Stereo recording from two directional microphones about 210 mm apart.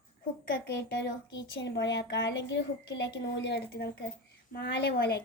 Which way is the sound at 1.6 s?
55° left (ahead or behind).